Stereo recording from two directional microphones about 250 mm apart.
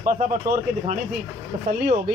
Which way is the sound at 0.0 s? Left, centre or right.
Right.